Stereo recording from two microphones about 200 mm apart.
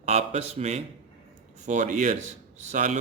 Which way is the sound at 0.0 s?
30° right (ahead or behind).